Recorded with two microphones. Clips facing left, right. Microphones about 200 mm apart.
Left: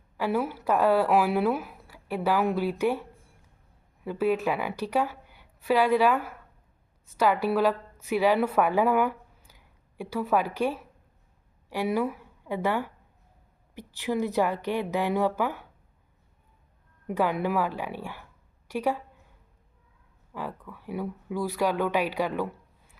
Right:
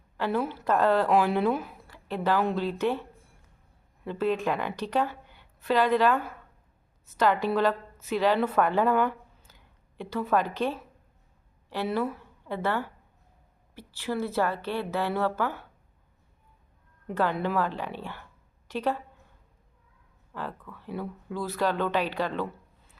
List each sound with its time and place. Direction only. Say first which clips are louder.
0.2 s speech: left 1 dB; 10° left (ahead or behind)
4.0 s a woman's voice: left 2 dB; 10° left (ahead or behind)
17.1 s speech: left 1 dB; 10° left (ahead or behind)
20.3 s speech: left 1 dB; 10° left (ahead or behind)